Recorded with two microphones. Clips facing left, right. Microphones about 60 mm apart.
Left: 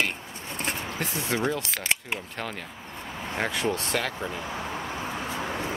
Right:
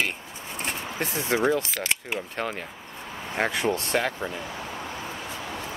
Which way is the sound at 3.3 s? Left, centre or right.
Centre.